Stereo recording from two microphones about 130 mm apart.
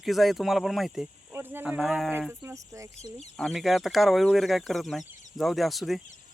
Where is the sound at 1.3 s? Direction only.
15° right (ahead or behind).